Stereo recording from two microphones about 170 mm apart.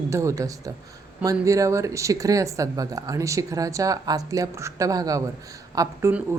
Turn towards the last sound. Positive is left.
turn(degrees=-20)  # may be behind; listen again after turning